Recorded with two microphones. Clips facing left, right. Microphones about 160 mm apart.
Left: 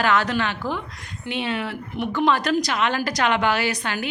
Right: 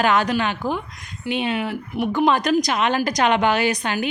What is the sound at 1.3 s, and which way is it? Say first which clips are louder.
A woman's voice: right 3 dB; 15° right (ahead or behind).